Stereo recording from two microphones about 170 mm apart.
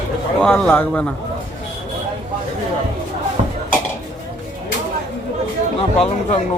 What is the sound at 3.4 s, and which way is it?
Dishes, 40° right (ahead or behind).